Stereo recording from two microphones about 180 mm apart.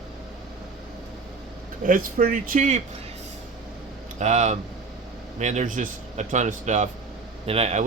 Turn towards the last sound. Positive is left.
turn(degrees=-35)  # may be behind; listen again after turning